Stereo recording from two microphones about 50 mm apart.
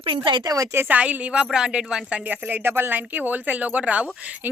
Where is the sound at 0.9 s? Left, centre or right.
Right.